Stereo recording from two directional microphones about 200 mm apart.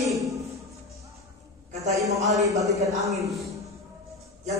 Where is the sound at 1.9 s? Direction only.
15° right (ahead or behind).